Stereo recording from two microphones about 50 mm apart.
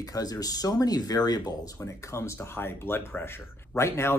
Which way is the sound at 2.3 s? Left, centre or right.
Left.